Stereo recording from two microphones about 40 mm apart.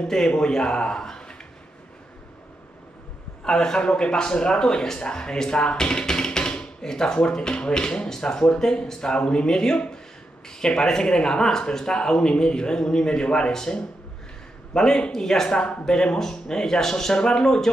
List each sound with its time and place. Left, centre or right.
0.0 s speech: centre
3.4 s speech: centre